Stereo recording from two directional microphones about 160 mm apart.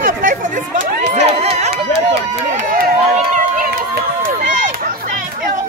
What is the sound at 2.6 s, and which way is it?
Run, 55° right (ahead or behind).